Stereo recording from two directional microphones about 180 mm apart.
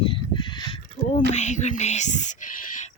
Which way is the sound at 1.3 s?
40° left (ahead or behind).